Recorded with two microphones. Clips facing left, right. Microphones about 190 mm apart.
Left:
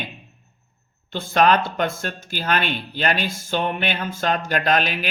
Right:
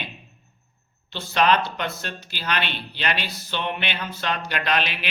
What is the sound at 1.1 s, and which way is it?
Speech, 50° left (ahead or behind).